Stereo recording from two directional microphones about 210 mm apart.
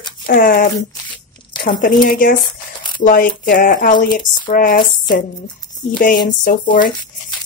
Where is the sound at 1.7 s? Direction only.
40° left (ahead or behind).